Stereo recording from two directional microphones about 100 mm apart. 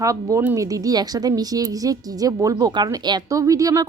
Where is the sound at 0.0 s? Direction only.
35° right (ahead or behind).